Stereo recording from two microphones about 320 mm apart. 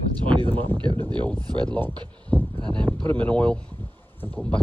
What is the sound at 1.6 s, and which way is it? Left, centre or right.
Speech, centre.